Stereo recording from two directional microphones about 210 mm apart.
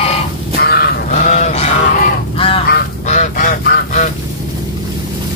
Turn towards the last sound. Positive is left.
turn(degrees=40)  # may be behind; listen again after turning